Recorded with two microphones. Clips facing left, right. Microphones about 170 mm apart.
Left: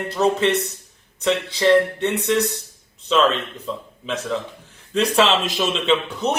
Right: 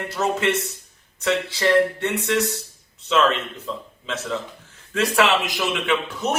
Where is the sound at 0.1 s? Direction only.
20° left (ahead or behind).